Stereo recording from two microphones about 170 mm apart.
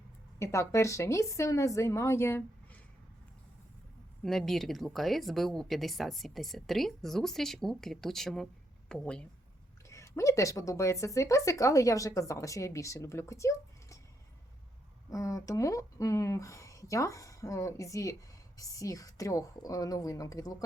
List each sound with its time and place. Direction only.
0.3 s speech: 15° left (ahead or behind)
4.2 s speech: centre (ahead or behind)
9.9 s speech: 15° left (ahead or behind)
15.1 s speech: 20° left (ahead or behind)